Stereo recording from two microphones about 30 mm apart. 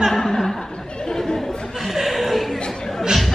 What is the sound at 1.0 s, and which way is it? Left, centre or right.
Chatter, centre.